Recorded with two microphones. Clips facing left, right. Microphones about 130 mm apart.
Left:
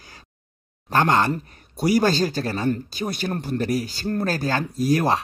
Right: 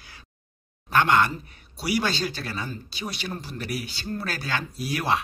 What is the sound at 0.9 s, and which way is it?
Speech, 40° left (ahead or behind).